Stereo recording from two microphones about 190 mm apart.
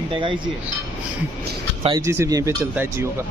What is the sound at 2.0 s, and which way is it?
Speech, 15° right (ahead or behind).